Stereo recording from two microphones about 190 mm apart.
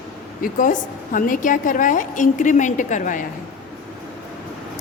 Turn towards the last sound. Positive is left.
turn(degrees=45)  # may be behind; listen again after turning